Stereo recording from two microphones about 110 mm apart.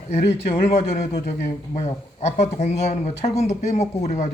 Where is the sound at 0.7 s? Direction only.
75° left (ahead or behind); by 4.2 s 90° left.